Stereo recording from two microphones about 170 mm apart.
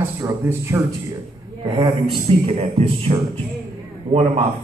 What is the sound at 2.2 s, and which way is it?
A man's voice, 40° right (ahead or behind).